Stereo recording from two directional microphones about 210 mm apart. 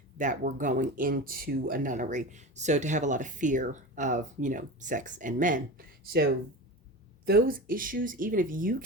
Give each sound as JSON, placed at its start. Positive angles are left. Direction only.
{"t": 0.2, "sound": "speech", "side_deg": -35}
{"t": 7.3, "sound": "speech", "side_deg": -45}